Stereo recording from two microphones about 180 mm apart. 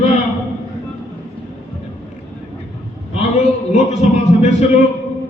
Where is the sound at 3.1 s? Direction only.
40° left (ahead or behind).